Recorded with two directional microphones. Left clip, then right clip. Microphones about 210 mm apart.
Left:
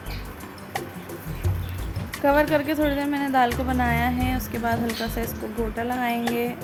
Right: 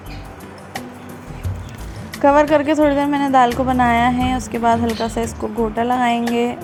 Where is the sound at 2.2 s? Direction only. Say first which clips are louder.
Right 7 dB; 25° right (ahead or behind).